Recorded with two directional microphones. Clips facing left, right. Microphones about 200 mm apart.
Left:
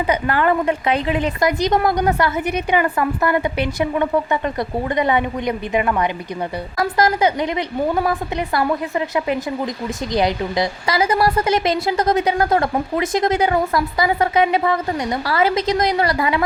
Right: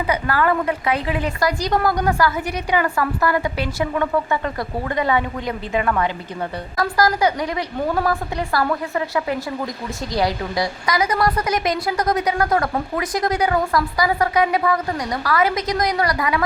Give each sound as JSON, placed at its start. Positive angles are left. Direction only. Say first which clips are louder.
{"t": 0.1, "sound": "a woman's voice", "louder": "left 1 dB", "side_deg": 25}